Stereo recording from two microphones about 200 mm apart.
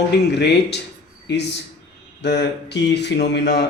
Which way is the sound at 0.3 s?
60° left (ahead or behind).